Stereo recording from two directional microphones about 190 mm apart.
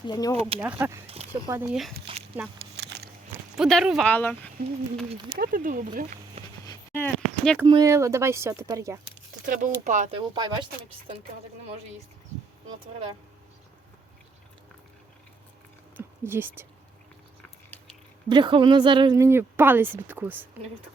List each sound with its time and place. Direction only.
0.1 s speech: 20° left (ahead or behind)
0.6 s speech: 10° right (ahead or behind)
1.0 s a sound: 30° right (ahead or behind)
1.3 s speech: 10° right (ahead or behind)
2.1 s walk: 25° right (ahead or behind)
2.6 s a sound: 60° right (ahead or behind)
3.6 s speech: centre (ahead or behind)
5.4 s speech: 45° right (ahead or behind)
6.9 s a sound: 5° left (ahead or behind)
7.6 s speech: 20° right (ahead or behind)
9.0 s speech: 40° right (ahead or behind)
10.2 s speech: 25° right (ahead or behind)
16.0 s speech: 10° right (ahead or behind)
18.3 s speech: 25° right (ahead or behind); by 20.5 s 10° right (ahead or behind)